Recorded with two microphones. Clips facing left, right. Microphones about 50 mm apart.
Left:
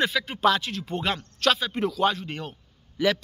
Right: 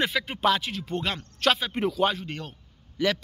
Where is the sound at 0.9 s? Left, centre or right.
Centre.